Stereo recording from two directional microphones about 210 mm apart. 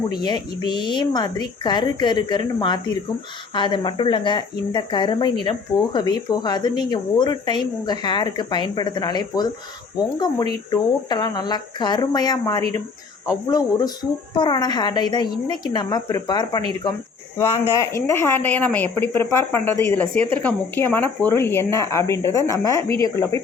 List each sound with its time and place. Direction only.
0.1 s speech: 20° left (ahead or behind)